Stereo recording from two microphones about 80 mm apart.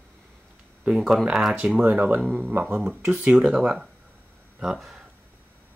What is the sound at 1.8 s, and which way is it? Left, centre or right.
Speech, right.